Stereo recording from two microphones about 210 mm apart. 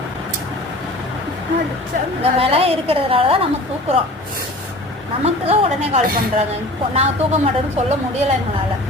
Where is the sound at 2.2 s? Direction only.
30° right (ahead or behind).